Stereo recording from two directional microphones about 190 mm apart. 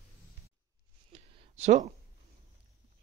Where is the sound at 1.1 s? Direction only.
35° right (ahead or behind).